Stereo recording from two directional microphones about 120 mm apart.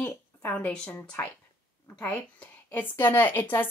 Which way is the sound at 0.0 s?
15° left (ahead or behind).